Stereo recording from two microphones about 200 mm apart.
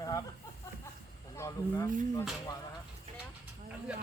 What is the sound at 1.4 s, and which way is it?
Speech, 15° left (ahead or behind).